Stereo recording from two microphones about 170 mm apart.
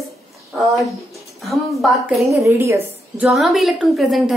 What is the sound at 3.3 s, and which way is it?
A woman's voice, centre (ahead or behind).